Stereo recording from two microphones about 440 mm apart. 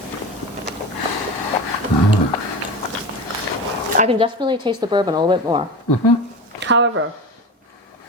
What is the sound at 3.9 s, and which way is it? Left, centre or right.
A woman's voice, centre.